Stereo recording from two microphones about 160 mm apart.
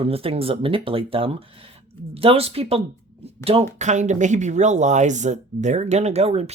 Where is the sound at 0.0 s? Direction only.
35° right (ahead or behind).